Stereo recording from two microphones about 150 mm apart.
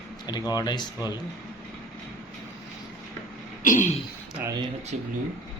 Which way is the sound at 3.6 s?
60° left (ahead or behind).